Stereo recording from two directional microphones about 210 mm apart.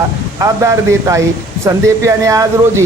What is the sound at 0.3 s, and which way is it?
Speech, 15° right (ahead or behind).